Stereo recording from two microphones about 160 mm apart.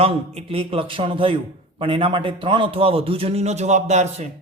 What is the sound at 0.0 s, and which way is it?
A man's voice, 40° right (ahead or behind).